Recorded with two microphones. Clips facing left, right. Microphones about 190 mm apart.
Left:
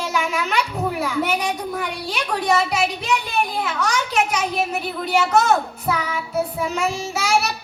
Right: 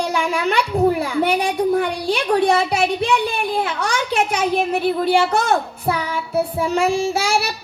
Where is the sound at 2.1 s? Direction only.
30° right (ahead or behind).